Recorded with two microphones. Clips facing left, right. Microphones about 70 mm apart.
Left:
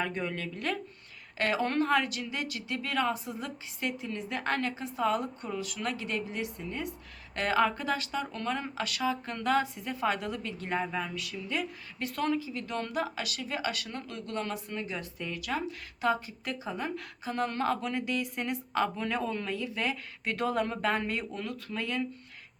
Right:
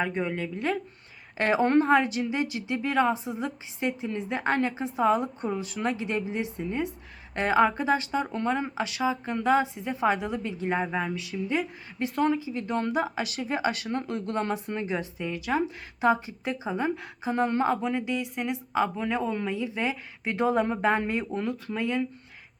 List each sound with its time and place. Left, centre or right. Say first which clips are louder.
0.0 s speech: right 5 dB; centre